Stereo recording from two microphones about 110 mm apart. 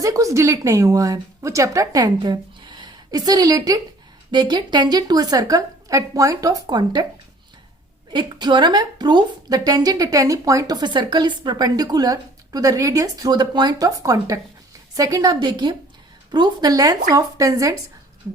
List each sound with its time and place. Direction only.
0.0 s a woman's voice: 30° right (ahead or behind)
8.1 s a woman's voice: 40° right (ahead or behind)